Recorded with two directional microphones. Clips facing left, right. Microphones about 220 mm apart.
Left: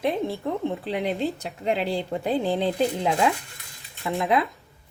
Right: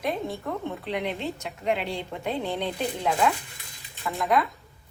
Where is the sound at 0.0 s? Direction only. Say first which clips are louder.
Left 4 dB; 30° left (ahead or behind).